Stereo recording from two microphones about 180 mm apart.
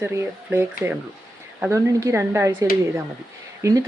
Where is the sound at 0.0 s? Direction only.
10° right (ahead or behind).